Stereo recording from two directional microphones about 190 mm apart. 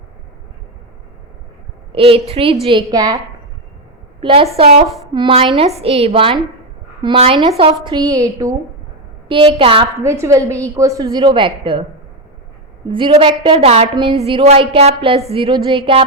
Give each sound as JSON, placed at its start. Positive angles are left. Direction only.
{"t": 1.9, "sound": "a woman's voice", "side_deg": -30}
{"t": 4.2, "sound": "a woman's voice", "side_deg": -30}
{"t": 10.0, "sound": "a woman's voice", "side_deg": -15}
{"t": 12.9, "sound": "a woman's voice", "side_deg": -30}